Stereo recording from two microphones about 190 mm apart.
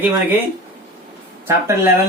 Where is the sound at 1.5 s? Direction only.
10° right (ahead or behind).